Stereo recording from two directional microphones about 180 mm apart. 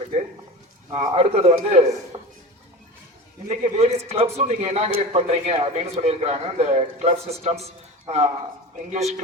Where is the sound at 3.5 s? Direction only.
35° right (ahead or behind).